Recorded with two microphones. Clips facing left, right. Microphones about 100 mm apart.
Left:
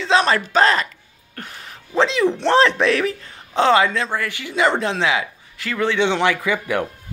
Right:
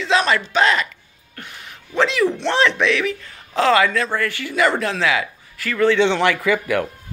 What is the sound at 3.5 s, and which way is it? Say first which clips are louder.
Speech: even; 25° left (ahead or behind).